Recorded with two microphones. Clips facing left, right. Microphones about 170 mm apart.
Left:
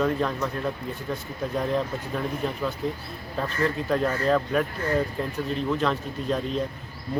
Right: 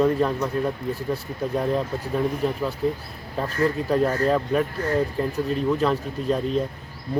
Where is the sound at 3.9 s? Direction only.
5° right (ahead or behind).